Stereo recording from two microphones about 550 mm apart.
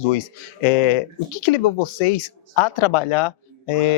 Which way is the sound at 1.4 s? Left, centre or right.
Left.